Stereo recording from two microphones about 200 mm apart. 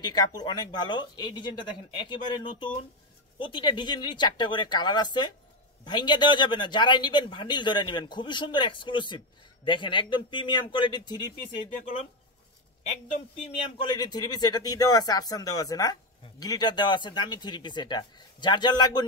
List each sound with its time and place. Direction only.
0.0 s speech: 20° left (ahead or behind)
13.7 s speech: 20° left (ahead or behind)